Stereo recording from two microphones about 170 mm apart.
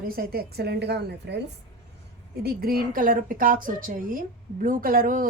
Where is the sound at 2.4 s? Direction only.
65° right (ahead or behind).